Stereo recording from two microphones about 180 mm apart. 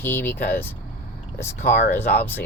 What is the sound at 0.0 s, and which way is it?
Speech, 10° left (ahead or behind).